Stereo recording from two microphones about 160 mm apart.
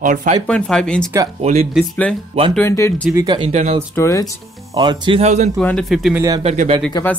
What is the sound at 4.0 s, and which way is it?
Speech, 20° left (ahead or behind).